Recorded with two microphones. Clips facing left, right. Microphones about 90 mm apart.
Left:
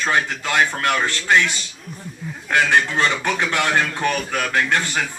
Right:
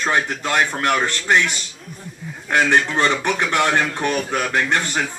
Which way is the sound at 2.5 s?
30° right (ahead or behind).